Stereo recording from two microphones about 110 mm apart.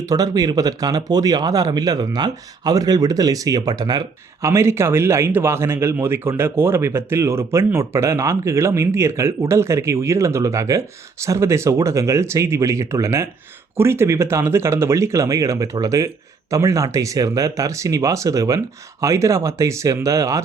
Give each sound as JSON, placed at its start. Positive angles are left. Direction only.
{"t": 0.0, "sound": "speech", "side_deg": -35}
{"t": 4.4, "sound": "a man's voice", "side_deg": -25}